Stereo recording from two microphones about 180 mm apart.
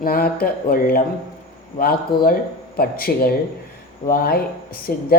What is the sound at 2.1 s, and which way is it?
Speech, 25° left (ahead or behind).